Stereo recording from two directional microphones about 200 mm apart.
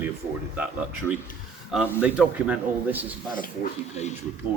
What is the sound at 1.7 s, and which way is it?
A man's voice, 5° right (ahead or behind).